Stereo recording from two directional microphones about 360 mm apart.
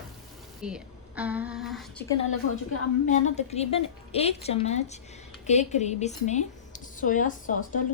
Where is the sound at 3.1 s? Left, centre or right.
Centre.